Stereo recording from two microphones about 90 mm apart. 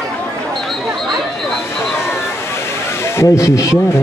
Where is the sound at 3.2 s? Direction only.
35° left (ahead or behind).